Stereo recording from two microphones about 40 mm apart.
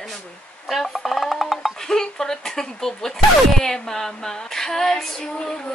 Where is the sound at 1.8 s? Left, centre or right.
Centre.